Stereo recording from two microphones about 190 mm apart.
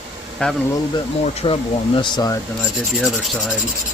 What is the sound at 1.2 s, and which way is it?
Speech, 30° left (ahead or behind).